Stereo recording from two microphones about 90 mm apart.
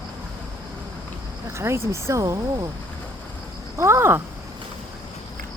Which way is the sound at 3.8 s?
30° right (ahead or behind).